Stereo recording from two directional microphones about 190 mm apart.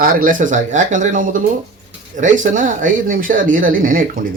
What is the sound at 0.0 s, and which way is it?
A man's voice, 50° right (ahead or behind).